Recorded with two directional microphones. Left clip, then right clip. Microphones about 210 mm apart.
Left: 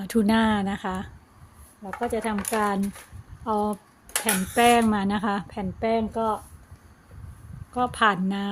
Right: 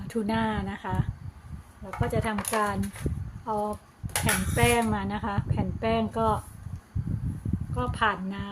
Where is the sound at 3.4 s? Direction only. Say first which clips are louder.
Left 4 dB; 45° left (ahead or behind).